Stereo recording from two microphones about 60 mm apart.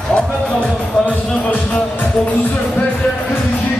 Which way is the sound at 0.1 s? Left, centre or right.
Centre.